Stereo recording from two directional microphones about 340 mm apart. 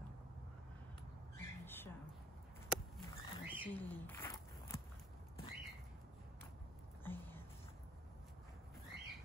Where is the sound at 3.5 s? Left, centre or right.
Centre.